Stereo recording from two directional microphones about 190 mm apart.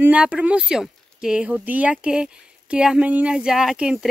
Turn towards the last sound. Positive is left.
turn(degrees=-5)  # may be behind; listen again after turning